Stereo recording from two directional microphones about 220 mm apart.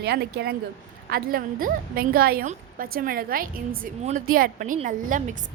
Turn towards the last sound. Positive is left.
turn(degrees=-35)  # may be behind; listen again after turning